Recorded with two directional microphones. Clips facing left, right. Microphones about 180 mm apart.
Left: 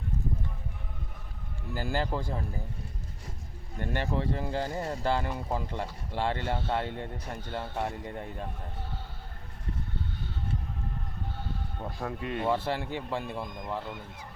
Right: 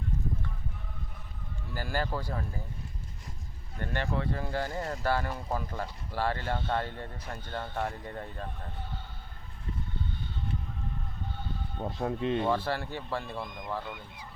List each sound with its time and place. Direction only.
1.7 s speech: 20° left (ahead or behind)
3.8 s speech: 20° left (ahead or behind)
6.6 s speech: 10° left (ahead or behind)
11.8 s speech: 25° right (ahead or behind)
12.5 s speech: 20° left (ahead or behind)